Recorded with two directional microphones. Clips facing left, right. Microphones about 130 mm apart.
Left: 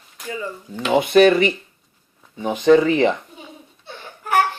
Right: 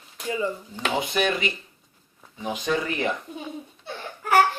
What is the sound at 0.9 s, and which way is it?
Speech, 65° left (ahead or behind).